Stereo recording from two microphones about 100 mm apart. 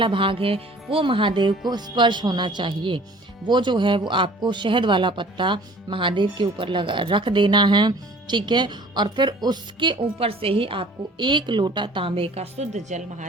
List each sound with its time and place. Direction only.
0.0 s a woman's voice: 60° right (ahead or behind)
10.2 s a woman's voice: 70° right (ahead or behind); by 12.6 s 90° right